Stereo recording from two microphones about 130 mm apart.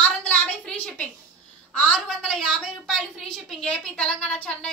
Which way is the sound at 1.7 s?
5° left (ahead or behind).